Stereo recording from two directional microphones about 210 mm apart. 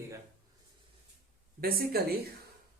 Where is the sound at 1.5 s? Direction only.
45° right (ahead or behind).